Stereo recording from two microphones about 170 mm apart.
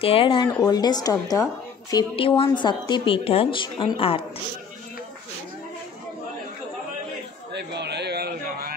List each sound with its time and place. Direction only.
0.0 s a woman's voice: 35° left (ahead or behind)
2.1 s a woman's voice: 30° left (ahead or behind)
7.5 s a sound: 80° right